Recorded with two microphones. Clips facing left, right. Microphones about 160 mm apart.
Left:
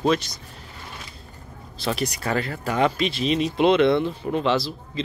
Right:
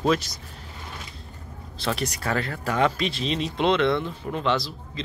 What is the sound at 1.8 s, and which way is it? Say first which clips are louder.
Speech: left 2 dB; 5° left (ahead or behind).